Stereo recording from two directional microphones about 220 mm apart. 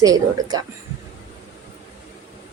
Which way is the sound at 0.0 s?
15° right (ahead or behind).